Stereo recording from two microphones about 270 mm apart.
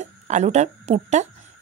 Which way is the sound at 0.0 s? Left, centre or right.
Right.